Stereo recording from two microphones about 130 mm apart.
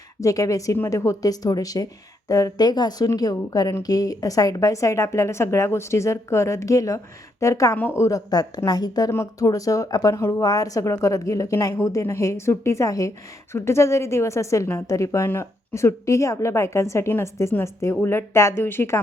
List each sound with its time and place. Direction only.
0.2 s a woman's voice: 25° left (ahead or behind)